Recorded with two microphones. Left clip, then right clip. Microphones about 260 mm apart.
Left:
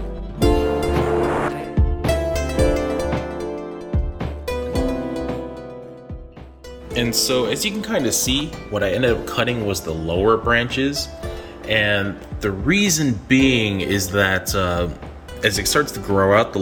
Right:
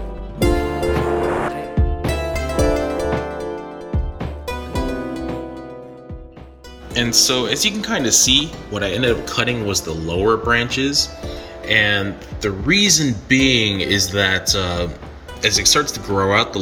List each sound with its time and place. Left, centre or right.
0.3 s music: centre
7.2 s speech: centre